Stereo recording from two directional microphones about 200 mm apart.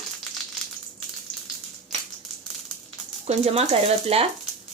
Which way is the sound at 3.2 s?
30° right (ahead or behind).